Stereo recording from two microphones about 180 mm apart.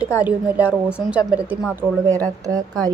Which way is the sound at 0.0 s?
10° right (ahead or behind).